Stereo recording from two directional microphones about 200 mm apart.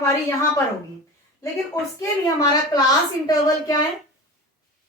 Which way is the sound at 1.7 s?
15° left (ahead or behind).